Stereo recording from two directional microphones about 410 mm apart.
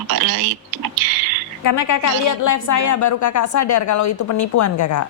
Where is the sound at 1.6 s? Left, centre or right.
Left.